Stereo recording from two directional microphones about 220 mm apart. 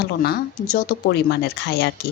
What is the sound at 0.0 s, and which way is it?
A woman's voice, 45° left (ahead or behind).